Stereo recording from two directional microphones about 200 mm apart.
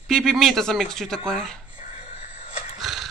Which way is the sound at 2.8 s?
Centre (ahead or behind).